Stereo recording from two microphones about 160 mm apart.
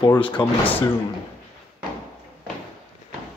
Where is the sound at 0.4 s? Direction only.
10° left (ahead or behind).